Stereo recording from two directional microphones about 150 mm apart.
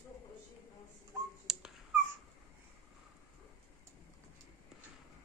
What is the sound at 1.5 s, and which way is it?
Dog, 5° right (ahead or behind).